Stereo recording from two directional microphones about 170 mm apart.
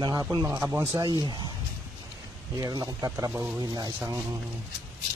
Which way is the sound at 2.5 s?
20° right (ahead or behind).